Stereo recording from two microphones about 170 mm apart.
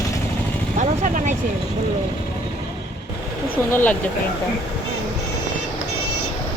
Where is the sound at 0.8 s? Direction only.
45° right (ahead or behind).